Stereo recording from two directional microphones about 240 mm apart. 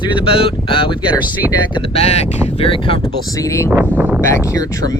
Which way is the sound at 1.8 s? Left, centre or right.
Left.